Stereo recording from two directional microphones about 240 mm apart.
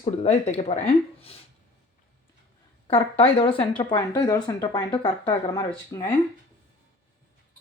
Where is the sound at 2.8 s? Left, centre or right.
Left.